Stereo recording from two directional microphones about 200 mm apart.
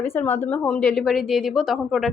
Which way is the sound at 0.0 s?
10° left (ahead or behind).